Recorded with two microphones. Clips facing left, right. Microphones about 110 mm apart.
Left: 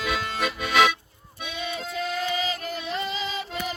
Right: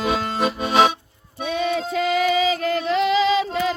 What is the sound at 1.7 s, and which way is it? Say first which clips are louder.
Female singing: right 6 dB; 90° right.